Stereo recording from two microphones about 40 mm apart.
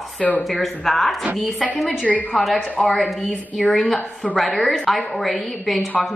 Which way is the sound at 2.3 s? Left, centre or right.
Centre.